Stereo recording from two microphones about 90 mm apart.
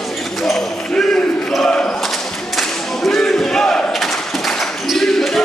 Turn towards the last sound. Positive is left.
turn(degrees=0)  # may be behind; listen again after turning